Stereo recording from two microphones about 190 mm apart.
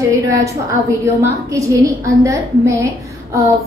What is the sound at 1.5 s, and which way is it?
A woman's voice, 15° right (ahead or behind).